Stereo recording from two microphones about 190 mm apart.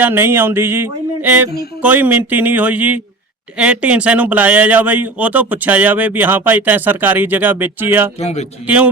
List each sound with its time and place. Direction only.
0.0 s speech: 10° right (ahead or behind)
8.2 s speech: 35° left (ahead or behind)
8.6 s speech: 5° right (ahead or behind)